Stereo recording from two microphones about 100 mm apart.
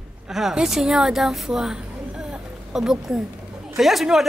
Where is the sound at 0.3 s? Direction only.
5° right (ahead or behind).